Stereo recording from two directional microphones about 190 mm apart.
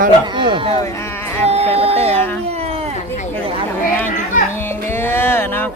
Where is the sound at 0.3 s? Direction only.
25° right (ahead or behind).